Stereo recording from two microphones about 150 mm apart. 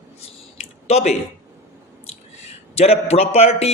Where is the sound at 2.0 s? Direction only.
45° left (ahead or behind).